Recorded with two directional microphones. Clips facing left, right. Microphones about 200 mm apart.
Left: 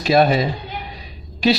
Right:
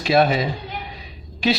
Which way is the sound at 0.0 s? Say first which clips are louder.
Left 2 dB; 40° left (ahead or behind).